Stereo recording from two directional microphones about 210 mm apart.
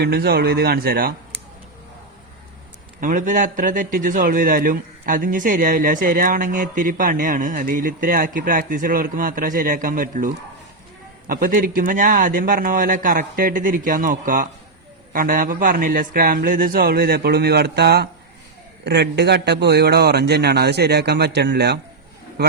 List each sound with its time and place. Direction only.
0.0 s a man's voice: 50° right (ahead or behind)
3.0 s a man's voice: 40° right (ahead or behind)